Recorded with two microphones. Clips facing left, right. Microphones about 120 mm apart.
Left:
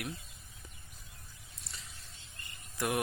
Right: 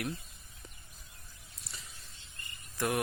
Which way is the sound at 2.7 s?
15° left (ahead or behind).